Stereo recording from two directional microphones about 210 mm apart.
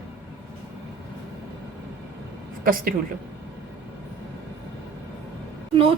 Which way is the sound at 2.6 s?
45° right (ahead or behind).